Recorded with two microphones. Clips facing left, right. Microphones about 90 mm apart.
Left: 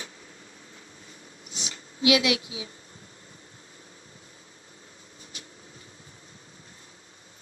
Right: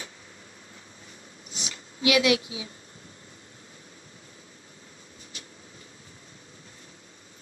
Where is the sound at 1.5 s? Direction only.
20° left (ahead or behind).